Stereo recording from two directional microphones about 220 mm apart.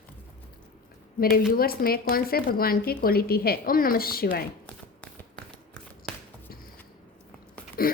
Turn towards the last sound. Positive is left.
turn(degrees=40)  # may be behind; listen again after turning